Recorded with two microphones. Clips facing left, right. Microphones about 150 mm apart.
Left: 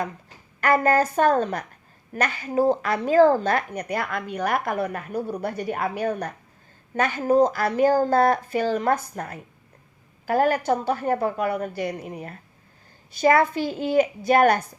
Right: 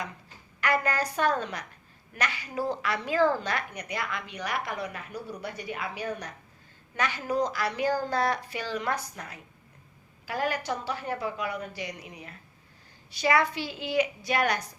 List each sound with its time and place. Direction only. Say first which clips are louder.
0.6 s a woman's voice: left 8 dB; 45° left (ahead or behind)